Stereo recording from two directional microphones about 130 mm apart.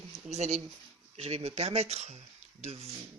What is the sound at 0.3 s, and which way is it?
Speech, 60° right (ahead or behind).